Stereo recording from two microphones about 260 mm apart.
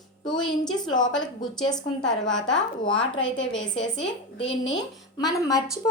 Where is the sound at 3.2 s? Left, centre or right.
Left.